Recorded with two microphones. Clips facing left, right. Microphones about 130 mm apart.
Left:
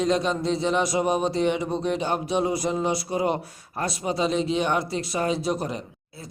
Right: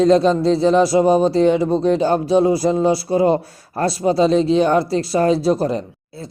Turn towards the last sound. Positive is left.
turn(degrees=-35)  # may be behind; listen again after turning